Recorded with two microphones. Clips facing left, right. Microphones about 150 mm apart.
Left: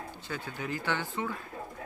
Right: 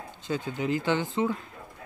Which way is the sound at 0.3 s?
20° right (ahead or behind).